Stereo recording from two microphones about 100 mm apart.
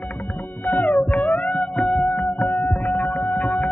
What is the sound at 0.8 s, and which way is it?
Music, 5° left (ahead or behind).